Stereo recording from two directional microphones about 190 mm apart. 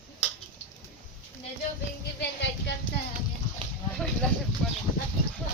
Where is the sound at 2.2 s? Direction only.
65° left (ahead or behind).